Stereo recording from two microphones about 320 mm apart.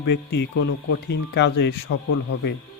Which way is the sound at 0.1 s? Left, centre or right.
Left.